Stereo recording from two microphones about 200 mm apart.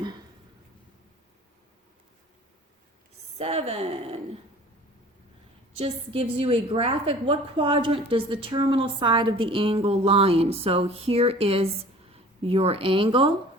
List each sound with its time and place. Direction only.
3.3 s a woman's voice: 30° right (ahead or behind)
5.7 s a woman's voice: 30° right (ahead or behind)